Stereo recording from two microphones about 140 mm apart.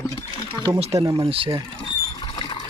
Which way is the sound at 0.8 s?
45° right (ahead or behind).